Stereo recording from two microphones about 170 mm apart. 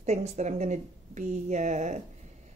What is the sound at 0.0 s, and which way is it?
A woman's voice, 40° right (ahead or behind).